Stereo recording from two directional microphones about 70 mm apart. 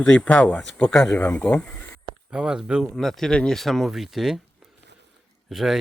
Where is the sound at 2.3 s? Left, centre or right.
Centre.